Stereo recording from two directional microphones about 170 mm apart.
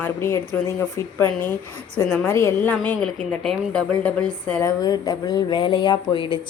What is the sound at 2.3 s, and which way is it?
A woman's voice, 15° left (ahead or behind).